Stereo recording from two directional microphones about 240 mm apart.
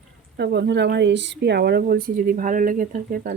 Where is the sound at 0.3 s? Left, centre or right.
Right.